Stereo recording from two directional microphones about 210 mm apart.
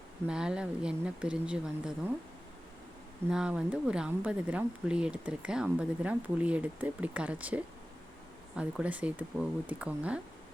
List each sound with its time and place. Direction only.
0.3 s speech: 5° right (ahead or behind)
3.2 s speech: 5° right (ahead or behind)